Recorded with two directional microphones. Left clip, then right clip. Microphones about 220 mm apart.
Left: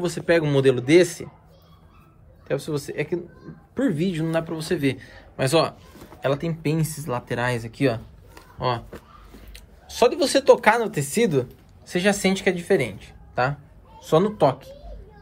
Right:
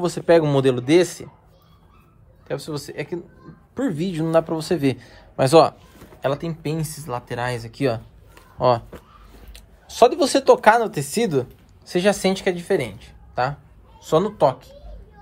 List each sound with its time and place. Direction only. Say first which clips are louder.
0.4 s a man's voice: right 1 dB; 20° right (ahead or behind)
2.4 s a man's voice: left 2 dB; 15° right (ahead or behind)